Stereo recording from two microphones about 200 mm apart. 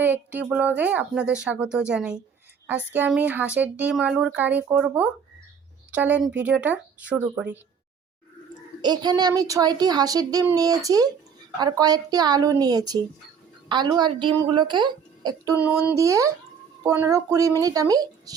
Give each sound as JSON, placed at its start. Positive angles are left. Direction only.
{"t": 0.0, "sound": "speech", "side_deg": -10}
{"t": 8.8, "sound": "speech", "side_deg": -20}
{"t": 15.5, "sound": "speech", "side_deg": -10}